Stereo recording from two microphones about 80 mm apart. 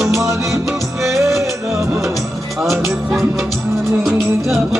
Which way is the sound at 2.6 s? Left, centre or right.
Centre.